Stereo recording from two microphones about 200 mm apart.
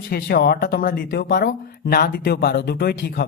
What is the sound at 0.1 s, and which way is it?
A man's voice, 50° left (ahead or behind).